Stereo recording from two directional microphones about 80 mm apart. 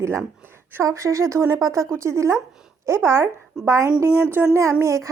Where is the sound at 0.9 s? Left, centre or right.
Right.